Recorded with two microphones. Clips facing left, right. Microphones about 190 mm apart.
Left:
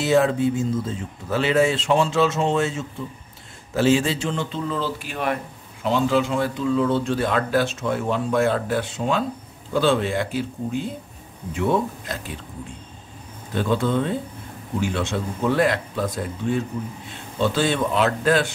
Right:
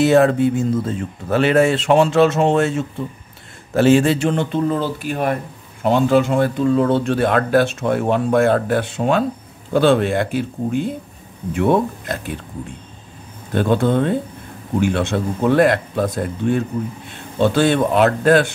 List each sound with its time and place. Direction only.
0.0 s speech: 60° right (ahead or behind)
13.6 s speech: 55° right (ahead or behind)